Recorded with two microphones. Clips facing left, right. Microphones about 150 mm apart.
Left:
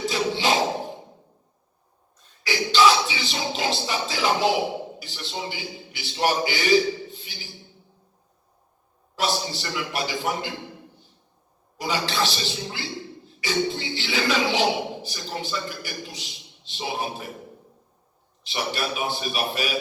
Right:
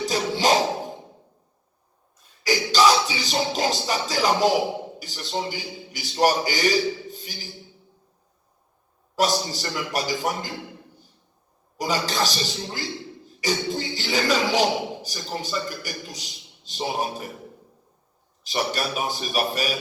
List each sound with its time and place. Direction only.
0.0 s music: 40° right (ahead or behind)
2.4 s music: 40° right (ahead or behind)
9.1 s a man's voice: 40° right (ahead or behind)
11.8 s a man's voice: 40° right (ahead or behind)
18.4 s a man's voice: 40° right (ahead or behind)